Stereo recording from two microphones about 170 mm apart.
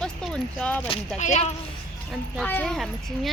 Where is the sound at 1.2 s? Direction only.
45° left (ahead or behind).